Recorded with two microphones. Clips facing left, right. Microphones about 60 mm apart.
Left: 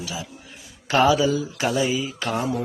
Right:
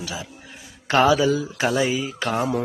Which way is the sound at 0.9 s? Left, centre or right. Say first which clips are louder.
Right 1 dB; right.